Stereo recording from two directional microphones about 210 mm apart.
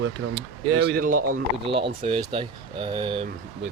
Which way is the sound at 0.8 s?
50° right (ahead or behind).